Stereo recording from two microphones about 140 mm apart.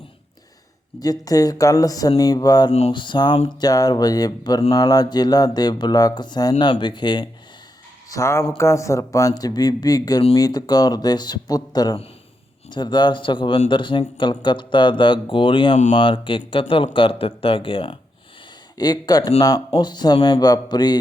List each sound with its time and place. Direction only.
0.9 s speech: 25° left (ahead or behind)
8.1 s speech: 20° left (ahead or behind); by 17.9 s 40° left (ahead or behind)
18.8 s speech: 30° left (ahead or behind)